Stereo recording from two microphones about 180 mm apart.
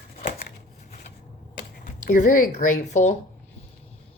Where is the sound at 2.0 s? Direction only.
45° left (ahead or behind).